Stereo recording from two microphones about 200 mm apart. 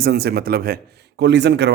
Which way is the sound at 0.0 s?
55° right (ahead or behind).